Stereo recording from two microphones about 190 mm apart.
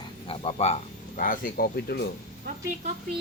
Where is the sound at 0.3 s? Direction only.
30° left (ahead or behind); by 2.0 s 55° left (ahead or behind).